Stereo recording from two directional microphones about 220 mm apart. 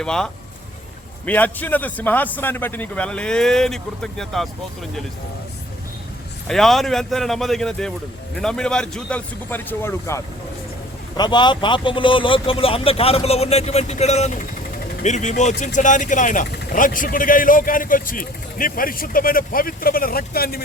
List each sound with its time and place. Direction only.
0.0 s a man's voice: 5° left (ahead or behind)
6.5 s a man's voice: centre (ahead or behind); by 20.6 s 45° left (ahead or behind)